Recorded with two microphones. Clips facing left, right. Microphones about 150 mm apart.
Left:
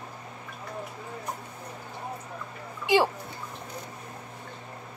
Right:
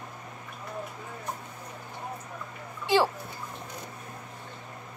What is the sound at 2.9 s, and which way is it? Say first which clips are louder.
Speech: left 1 dB; 15° left (ahead or behind).